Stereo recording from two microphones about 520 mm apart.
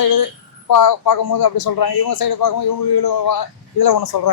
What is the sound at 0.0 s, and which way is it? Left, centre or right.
A man's voice, left.